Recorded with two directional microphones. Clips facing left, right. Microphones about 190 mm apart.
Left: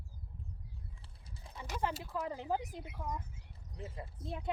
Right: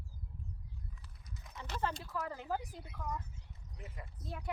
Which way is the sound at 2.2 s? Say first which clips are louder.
Left 3 dB; 20° left (ahead or behind).